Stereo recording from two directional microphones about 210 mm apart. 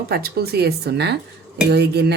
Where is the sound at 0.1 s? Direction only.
45° right (ahead or behind).